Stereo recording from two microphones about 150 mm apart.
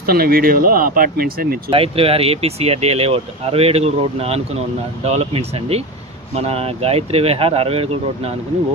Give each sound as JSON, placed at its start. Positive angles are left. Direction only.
{"t": 0.0, "sound": "speech", "side_deg": -85}
{"t": 1.7, "sound": "speech", "side_deg": -40}